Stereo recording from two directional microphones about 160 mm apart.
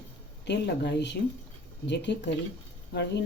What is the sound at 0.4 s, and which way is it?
Speech, 90° left.